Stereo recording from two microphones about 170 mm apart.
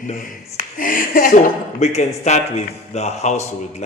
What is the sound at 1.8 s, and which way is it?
A man's voice, 40° left (ahead or behind).